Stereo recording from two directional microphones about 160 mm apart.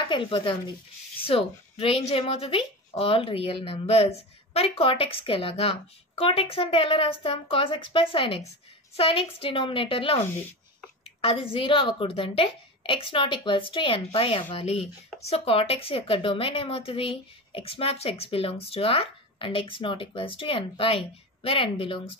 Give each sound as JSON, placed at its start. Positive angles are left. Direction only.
{"t": 0.1, "sound": "speech", "side_deg": 30}